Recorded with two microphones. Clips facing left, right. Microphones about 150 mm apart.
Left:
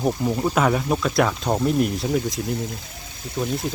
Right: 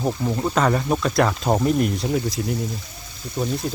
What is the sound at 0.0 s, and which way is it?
Speech, 5° left (ahead or behind).